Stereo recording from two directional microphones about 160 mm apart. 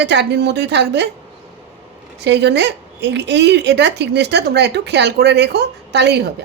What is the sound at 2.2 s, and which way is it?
Speech, 90° right.